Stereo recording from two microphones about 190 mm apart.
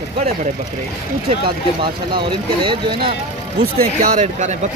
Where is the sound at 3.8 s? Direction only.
45° right (ahead or behind).